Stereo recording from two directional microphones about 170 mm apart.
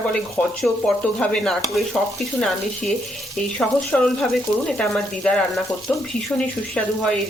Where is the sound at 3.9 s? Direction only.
5° left (ahead or behind).